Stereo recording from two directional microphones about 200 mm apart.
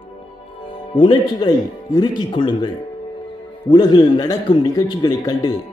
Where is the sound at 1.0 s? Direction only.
25° left (ahead or behind).